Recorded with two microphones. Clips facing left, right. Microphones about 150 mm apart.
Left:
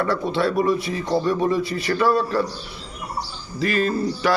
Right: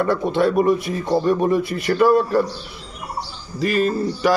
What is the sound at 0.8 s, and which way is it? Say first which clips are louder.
Speech: right 1 dB; 50° right (ahead or behind).